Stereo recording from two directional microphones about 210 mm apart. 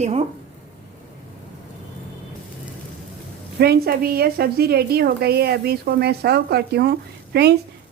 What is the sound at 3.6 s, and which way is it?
A woman's voice, 45° right (ahead or behind).